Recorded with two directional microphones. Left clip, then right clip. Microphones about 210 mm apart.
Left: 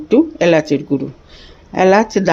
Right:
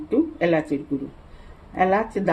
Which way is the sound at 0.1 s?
45° left (ahead or behind).